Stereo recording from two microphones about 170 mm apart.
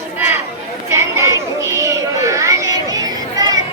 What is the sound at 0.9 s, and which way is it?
Chatter, 15° right (ahead or behind).